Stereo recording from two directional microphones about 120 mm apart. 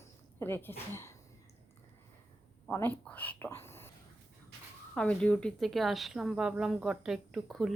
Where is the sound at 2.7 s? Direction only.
15° left (ahead or behind).